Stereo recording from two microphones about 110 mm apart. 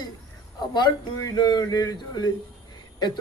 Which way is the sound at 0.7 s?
40° left (ahead or behind).